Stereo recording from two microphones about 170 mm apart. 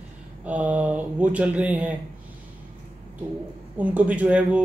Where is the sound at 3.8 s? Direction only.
10° right (ahead or behind).